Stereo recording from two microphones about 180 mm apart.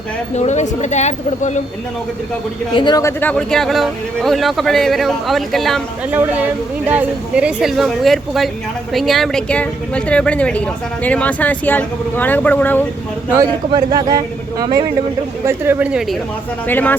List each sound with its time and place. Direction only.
0.3 s speech: 40° left (ahead or behind)
2.7 s speech: 25° left (ahead or behind)
13.3 s speech: 20° right (ahead or behind); by 16.1 s 5° right (ahead or behind)
16.6 s speech: 10° left (ahead or behind)